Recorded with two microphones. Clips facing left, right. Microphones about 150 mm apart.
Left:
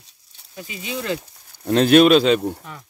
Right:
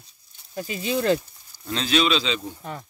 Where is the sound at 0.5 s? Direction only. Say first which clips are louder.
Right 4 dB; 40° right (ahead or behind).